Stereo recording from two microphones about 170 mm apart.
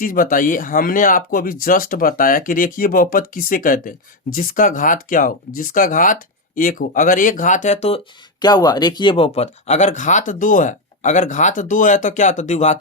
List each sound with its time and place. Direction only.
0.0 s speech: 55° left (ahead or behind); by 8.0 s 40° left (ahead or behind)
8.4 s speech: 25° left (ahead or behind); by 12.8 s 45° left (ahead or behind)